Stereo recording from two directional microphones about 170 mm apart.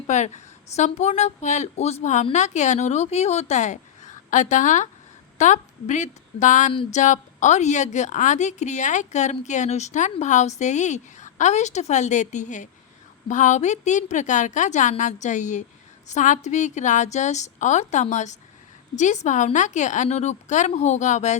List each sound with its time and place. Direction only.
0.1 s a woman's voice: 45° left (ahead or behind)